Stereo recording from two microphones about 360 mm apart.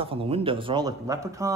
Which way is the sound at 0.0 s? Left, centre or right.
Centre.